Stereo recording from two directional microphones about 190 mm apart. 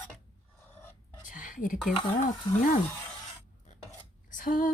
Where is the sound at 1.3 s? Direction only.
45° left (ahead or behind).